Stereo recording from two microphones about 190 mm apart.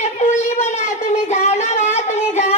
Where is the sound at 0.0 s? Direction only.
35° left (ahead or behind).